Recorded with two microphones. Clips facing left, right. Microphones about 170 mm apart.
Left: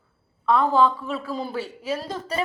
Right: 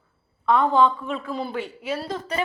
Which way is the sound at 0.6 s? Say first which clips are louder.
Even; 5° left (ahead or behind).